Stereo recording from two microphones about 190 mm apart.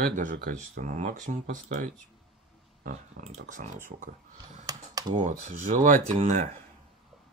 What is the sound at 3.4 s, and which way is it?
Speech, 40° right (ahead or behind).